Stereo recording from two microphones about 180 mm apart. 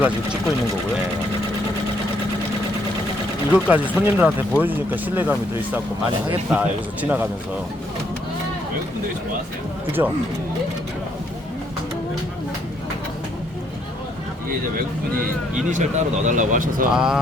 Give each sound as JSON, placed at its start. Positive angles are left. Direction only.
{"t": 3.5, "sound": "speech", "side_deg": -10}
{"t": 10.0, "sound": "speech", "side_deg": -15}
{"t": 15.7, "sound": "speech", "side_deg": -45}
{"t": 16.9, "sound": "speech", "side_deg": -5}